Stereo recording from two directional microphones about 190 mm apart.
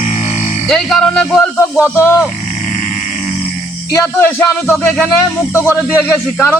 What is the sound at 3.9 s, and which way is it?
Speech, 10° left (ahead or behind).